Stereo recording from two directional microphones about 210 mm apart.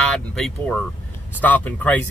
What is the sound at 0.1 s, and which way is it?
Speech, 5° left (ahead or behind).